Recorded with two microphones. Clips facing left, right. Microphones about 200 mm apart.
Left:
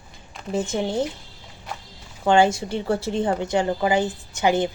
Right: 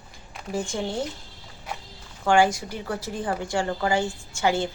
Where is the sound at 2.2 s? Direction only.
25° left (ahead or behind).